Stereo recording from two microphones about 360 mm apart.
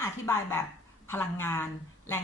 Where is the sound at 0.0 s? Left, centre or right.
Centre.